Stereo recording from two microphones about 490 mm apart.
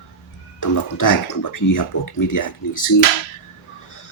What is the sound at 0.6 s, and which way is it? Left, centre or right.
Speech, left.